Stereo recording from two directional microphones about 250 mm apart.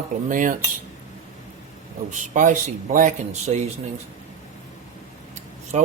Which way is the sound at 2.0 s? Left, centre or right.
Right.